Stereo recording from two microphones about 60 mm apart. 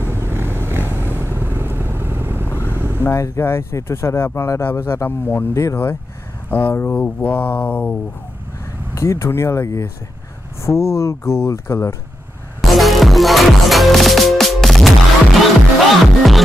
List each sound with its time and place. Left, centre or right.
0.0 s vehicle: right
2.5 s vehicle: left
3.0 s speech: left
5.5 s speech: left
6.7 s speech: left
8.9 s speech: left
12.6 s music: centre